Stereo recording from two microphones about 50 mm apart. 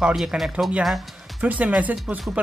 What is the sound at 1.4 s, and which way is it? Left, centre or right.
Speech, right.